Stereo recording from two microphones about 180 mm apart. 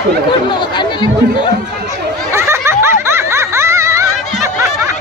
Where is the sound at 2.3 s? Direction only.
15° right (ahead or behind).